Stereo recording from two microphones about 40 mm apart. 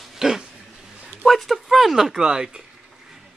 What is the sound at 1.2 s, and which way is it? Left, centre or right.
Speech, centre.